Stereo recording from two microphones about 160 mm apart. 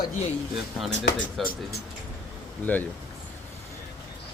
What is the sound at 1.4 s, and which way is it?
Speech, centre (ahead or behind).